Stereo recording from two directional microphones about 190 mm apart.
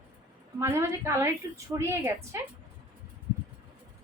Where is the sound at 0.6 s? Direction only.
15° right (ahead or behind).